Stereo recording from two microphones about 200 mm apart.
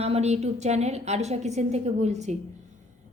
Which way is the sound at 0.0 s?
30° right (ahead or behind).